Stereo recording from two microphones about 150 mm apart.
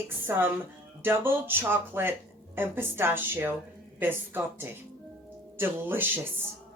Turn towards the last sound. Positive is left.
turn(degrees=-15)  # may be behind; listen again after turning